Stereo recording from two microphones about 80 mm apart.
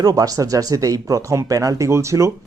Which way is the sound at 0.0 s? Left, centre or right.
Right.